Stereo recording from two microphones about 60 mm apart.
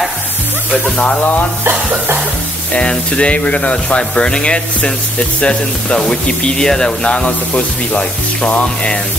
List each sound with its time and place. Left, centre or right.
0.9 s speech: left
2.7 s speech: centre